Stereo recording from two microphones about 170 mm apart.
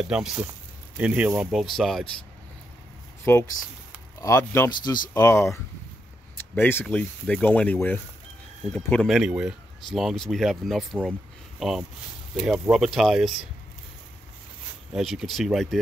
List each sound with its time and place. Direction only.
0.1 s speech: 5° right (ahead or behind)
3.3 s speech: 10° left (ahead or behind)
14.9 s speech: centre (ahead or behind)